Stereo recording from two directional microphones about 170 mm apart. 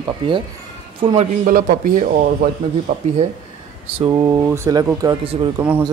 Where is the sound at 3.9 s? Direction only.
20° right (ahead or behind).